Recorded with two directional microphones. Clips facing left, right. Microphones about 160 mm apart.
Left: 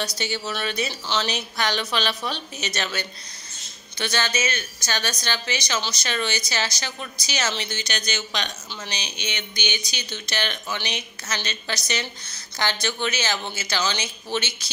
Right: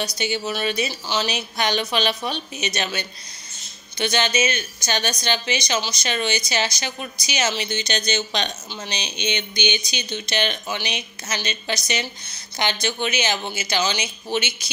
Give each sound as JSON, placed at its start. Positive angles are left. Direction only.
{"t": 0.2, "sound": "a woman's voice", "side_deg": -15}